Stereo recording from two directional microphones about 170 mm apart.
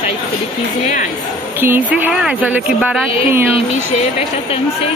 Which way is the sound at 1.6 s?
10° right (ahead or behind).